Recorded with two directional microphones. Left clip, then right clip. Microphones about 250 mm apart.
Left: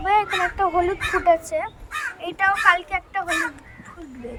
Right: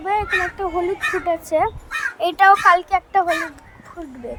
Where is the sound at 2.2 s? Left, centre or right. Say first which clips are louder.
Right 7 dB; right.